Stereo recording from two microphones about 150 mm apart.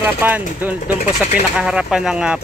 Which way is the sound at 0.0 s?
10° right (ahead or behind).